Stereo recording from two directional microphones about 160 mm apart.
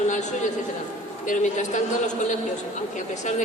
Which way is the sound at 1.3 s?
50° left (ahead or behind).